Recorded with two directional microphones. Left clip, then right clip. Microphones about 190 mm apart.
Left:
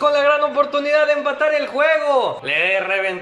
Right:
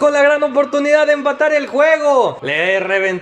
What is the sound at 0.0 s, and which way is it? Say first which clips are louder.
A man's voice: right 3 dB; 30° right (ahead or behind).